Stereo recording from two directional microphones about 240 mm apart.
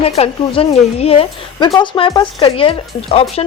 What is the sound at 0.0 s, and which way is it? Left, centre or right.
A woman's voice, left.